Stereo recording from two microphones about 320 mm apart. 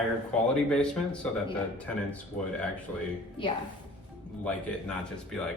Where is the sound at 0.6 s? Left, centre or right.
Centre.